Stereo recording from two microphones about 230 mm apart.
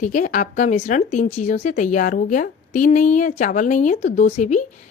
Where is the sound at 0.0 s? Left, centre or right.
Left.